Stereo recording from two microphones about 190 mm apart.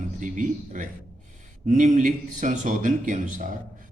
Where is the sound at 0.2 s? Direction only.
40° right (ahead or behind).